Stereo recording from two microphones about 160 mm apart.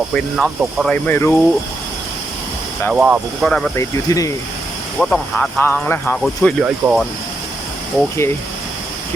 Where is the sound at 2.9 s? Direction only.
5° right (ahead or behind).